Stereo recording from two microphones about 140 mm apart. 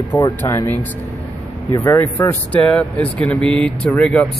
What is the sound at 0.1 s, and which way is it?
A man's voice, 15° left (ahead or behind).